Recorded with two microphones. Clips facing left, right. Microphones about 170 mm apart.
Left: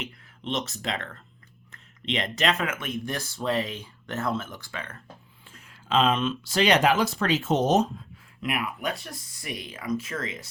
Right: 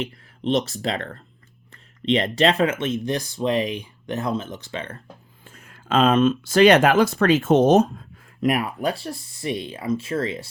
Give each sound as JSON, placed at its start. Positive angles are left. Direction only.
{"t": 0.0, "sound": "speech", "side_deg": -35}
{"t": 5.5, "sound": "speech", "side_deg": -50}